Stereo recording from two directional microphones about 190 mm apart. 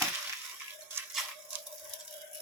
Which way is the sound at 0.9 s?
10° right (ahead or behind).